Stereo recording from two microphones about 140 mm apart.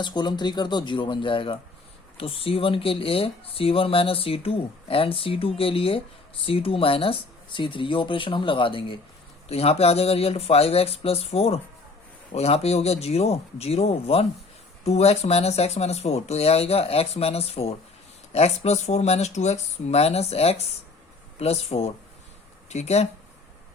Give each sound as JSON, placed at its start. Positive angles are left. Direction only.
{"t": 0.0, "sound": "speech", "side_deg": 30}